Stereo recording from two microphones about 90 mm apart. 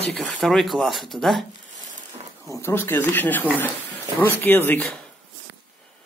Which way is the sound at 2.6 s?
25° left (ahead or behind).